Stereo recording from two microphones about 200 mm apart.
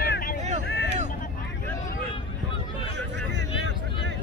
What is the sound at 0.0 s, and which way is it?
Vehicle, 45° left (ahead or behind).